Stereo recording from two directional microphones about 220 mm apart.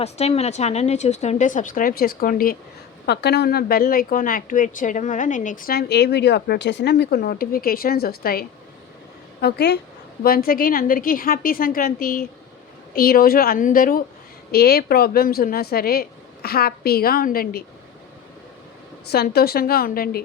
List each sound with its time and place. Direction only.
0.0 s speech: 30° left (ahead or behind)
19.1 s speech: 45° left (ahead or behind)